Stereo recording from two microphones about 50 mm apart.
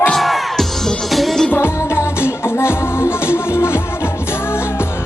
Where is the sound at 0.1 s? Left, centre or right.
Centre.